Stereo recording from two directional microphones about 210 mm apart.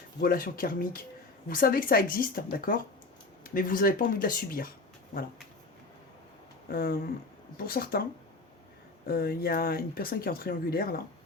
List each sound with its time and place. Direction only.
0.2 s speech: 45° left (ahead or behind)
6.7 s speech: 45° left (ahead or behind)
9.0 s speech: 45° left (ahead or behind)